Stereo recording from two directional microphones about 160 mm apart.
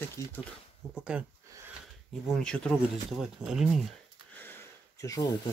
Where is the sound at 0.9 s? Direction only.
5° right (ahead or behind).